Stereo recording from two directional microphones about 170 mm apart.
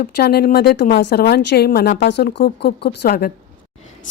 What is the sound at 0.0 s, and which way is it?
A woman's voice, 65° left (ahead or behind).